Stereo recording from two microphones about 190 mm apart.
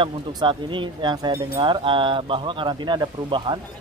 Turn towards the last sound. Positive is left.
turn(degrees=-25)  # may be behind; listen again after turning